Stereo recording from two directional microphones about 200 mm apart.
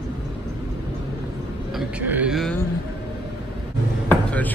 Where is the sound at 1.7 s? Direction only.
5° right (ahead or behind).